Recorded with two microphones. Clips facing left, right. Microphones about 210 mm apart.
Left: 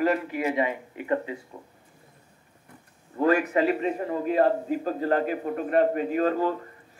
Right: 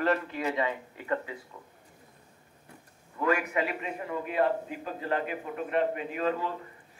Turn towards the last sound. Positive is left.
turn(degrees=40)  # may be behind; listen again after turning